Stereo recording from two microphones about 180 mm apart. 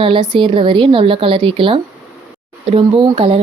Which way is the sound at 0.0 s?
30° right (ahead or behind).